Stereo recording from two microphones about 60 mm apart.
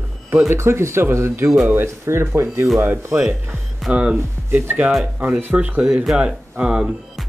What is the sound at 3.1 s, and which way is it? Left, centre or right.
Speech, centre.